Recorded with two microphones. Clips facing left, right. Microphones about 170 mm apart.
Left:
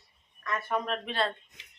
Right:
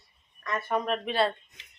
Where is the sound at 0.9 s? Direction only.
5° right (ahead or behind).